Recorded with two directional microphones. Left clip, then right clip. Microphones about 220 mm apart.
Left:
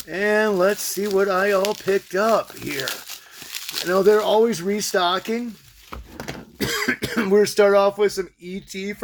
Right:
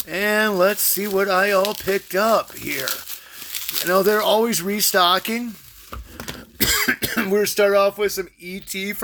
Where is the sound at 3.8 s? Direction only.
20° right (ahead or behind).